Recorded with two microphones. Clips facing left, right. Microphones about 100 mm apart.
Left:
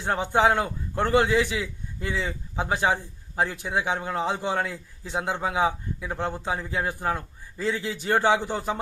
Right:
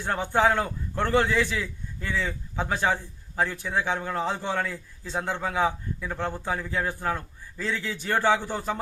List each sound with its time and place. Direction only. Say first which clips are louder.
0.0 s a man's voice: left 1 dB; 20° left (ahead or behind)